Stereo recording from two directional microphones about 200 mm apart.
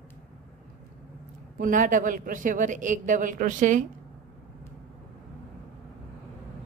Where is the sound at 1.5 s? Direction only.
40° right (ahead or behind).